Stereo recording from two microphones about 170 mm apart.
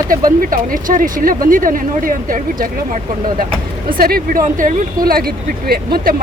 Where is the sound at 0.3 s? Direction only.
55° right (ahead or behind).